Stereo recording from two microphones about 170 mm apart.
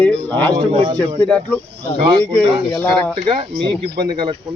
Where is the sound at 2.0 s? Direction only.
30° right (ahead or behind).